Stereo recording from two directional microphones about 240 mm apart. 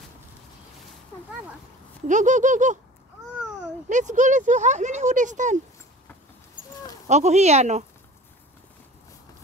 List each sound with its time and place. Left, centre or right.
2.0 s speech: right
3.9 s speech: right
7.1 s speech: right